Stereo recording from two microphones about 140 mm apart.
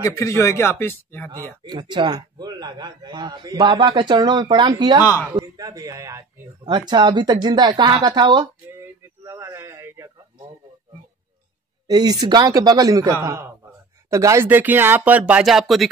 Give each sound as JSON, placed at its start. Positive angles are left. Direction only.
{"t": 0.0, "sound": "a man's voice", "side_deg": 20}
{"t": 1.6, "sound": "a man's voice", "side_deg": -35}
{"t": 9.2, "sound": "a sound", "side_deg": -20}
{"t": 11.9, "sound": "speech", "side_deg": -30}